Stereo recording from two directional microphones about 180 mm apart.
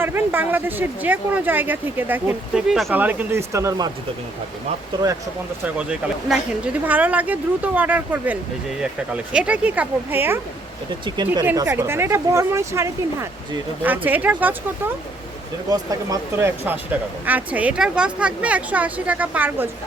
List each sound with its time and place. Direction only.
0.0 s speech: 10° right (ahead or behind)
5.6 s speech: 5° right (ahead or behind)
11.4 s speech: 20° right (ahead or behind)
15.7 s speech: 20° right (ahead or behind)